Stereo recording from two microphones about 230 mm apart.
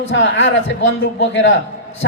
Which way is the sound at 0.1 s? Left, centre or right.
Left.